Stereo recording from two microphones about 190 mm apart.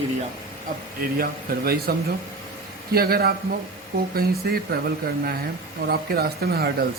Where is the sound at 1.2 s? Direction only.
55° right (ahead or behind).